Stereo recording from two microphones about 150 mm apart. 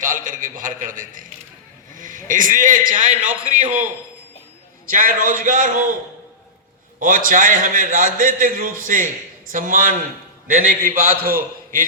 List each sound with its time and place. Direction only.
0.0 s a sound: 60° right (ahead or behind)
2.0 s a man's voice: 60° right (ahead or behind)
4.9 s a man's voice: 65° right (ahead or behind)
7.0 s a man's voice: 65° right (ahead or behind)